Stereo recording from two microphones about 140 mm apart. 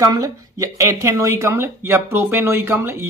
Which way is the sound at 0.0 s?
25° right (ahead or behind).